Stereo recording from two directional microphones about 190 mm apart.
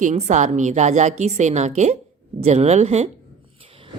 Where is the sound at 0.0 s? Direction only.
40° right (ahead or behind).